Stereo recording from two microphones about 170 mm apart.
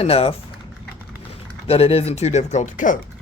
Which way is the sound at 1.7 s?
35° left (ahead or behind).